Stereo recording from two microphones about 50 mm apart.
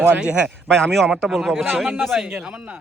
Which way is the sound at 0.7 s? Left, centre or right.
Centre.